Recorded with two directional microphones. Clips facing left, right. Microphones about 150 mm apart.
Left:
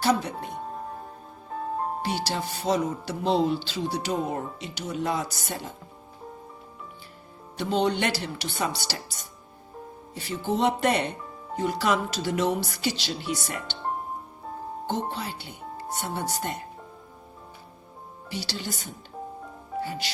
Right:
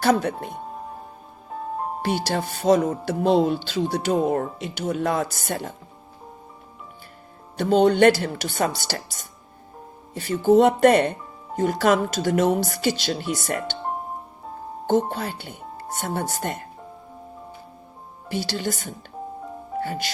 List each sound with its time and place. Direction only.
0.0 s speech: 55° right (ahead or behind)
0.4 s speech: centre (ahead or behind)
2.0 s speech: 50° right (ahead or behind)
7.5 s speech: 50° right (ahead or behind)
10.2 s speech: 50° right (ahead or behind)
14.8 s speech: 50° right (ahead or behind)
18.3 s speech: 50° right (ahead or behind)